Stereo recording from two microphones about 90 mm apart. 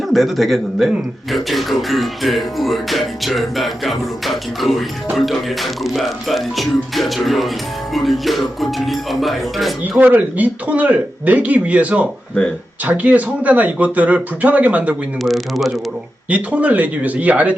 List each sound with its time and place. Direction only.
0.1 s speech: centre (ahead or behind)
10.0 s speech: 15° right (ahead or behind)
15.2 s speech: centre (ahead or behind)
16.3 s speech: 15° right (ahead or behind)